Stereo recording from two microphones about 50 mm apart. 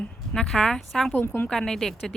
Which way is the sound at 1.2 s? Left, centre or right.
Left.